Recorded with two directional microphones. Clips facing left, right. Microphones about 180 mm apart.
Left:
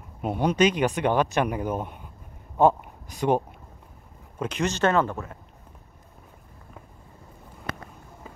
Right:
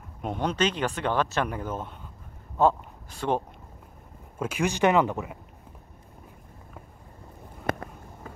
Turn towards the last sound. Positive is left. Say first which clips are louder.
# right 6 dB
turn(degrees=-50)  # may be behind; listen again after turning